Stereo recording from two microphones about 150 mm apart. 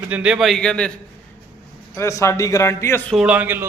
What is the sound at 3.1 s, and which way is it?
Speech, 10° right (ahead or behind).